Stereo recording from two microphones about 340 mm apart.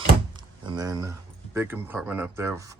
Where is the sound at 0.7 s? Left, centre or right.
Centre.